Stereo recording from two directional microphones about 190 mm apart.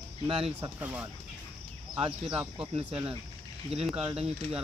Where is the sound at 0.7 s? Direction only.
10° right (ahead or behind).